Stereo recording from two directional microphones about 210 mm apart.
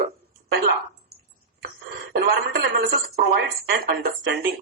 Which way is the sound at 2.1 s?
50° right (ahead or behind).